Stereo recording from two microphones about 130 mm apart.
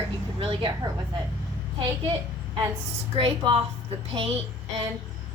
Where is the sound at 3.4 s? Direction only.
40° right (ahead or behind).